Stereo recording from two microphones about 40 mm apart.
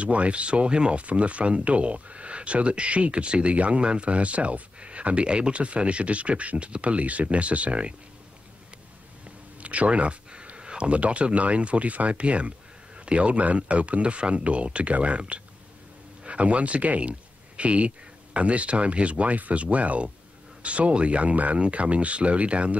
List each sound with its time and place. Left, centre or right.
0.0 s speech: right
9.6 s a sound: right
11.0 s speech: right